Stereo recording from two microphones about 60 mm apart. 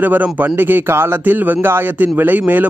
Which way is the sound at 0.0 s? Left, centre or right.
Right.